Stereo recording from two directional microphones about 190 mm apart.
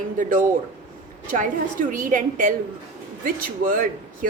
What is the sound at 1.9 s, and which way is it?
Speech, 45° right (ahead or behind).